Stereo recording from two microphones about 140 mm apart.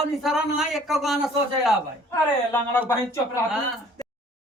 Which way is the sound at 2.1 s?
15° left (ahead or behind).